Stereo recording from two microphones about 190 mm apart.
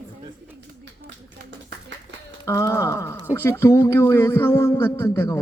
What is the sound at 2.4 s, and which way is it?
Speech, 15° left (ahead or behind).